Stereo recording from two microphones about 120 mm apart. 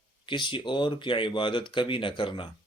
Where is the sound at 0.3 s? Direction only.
40° left (ahead or behind).